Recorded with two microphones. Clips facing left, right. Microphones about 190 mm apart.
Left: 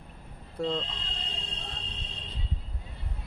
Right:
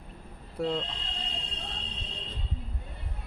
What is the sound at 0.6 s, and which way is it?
Speech, 5° right (ahead or behind).